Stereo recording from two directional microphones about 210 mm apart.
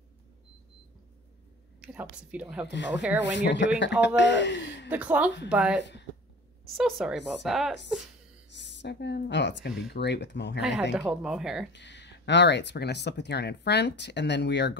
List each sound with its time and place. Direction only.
1.8 s a woman's voice: 5° right (ahead or behind)
3.2 s speech: 55° left (ahead or behind)
4.8 s a woman's voice: 5° right (ahead or behind)
6.8 s speech: 5° right (ahead or behind)
8.5 s speech: 55° left (ahead or behind)
10.8 s speech: 5° right (ahead or behind)
11.7 s speech: 55° left (ahead or behind)